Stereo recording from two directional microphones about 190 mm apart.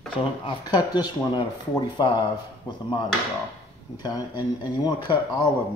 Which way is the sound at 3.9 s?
20° left (ahead or behind).